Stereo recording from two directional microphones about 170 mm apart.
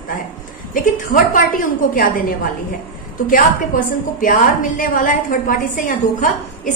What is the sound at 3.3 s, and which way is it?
A woman's voice, 55° left (ahead or behind).